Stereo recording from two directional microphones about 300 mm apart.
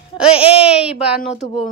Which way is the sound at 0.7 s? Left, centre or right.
Centre.